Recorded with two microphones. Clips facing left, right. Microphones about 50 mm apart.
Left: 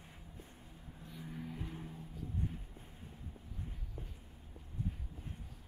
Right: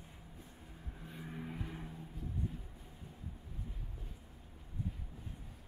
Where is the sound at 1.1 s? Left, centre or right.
Right.